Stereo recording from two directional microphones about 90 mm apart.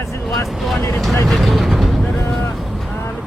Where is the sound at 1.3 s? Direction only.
Centre (ahead or behind).